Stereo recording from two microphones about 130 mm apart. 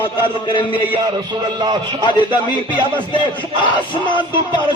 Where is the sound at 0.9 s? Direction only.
35° right (ahead or behind).